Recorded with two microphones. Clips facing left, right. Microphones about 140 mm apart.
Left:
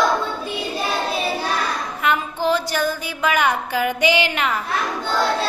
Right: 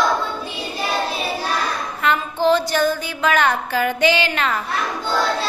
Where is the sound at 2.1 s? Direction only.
10° left (ahead or behind).